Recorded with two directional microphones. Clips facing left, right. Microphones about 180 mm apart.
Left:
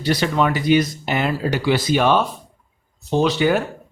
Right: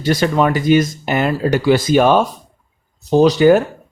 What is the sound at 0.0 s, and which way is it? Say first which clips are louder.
A man's voice: right 4 dB; 45° right (ahead or behind).